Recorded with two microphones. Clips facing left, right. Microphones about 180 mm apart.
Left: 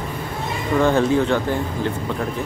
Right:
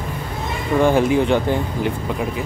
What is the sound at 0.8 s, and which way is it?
Speech, 10° right (ahead or behind).